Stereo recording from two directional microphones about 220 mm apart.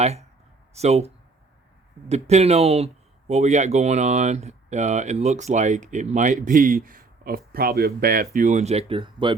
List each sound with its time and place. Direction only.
0.0 s speech: 30° right (ahead or behind)